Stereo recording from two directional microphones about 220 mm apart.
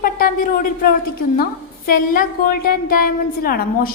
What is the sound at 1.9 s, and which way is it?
A woman's voice, 40° left (ahead or behind).